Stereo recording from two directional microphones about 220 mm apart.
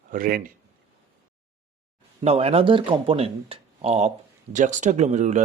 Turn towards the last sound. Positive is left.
turn(degrees=-30)  # may be behind; listen again after turning